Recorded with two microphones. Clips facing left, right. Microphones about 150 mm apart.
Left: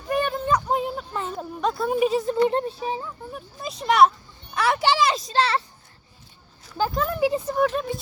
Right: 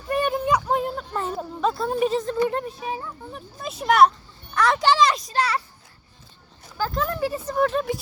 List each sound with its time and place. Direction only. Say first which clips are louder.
0.3 s a sound: right 2 dB; 10° right (ahead or behind)
0.7 s a sound: right 1 dB; centre (ahead or behind)
1.9 s a woman's voice: left 1 dB; 5° left (ahead or behind)
2.5 s speech: left 3 dB; 25° left (ahead or behind)
3.0 s speech: left 1 dB; centre (ahead or behind)
4.5 s a child's voice: right 2 dB; 10° left (ahead or behind)
5.1 s speech: left 2 dB; 30° left (ahead or behind)
6.8 s speech: left 2 dB; 25° left (ahead or behind)
7.5 s speech: right 1 dB; centre (ahead or behind)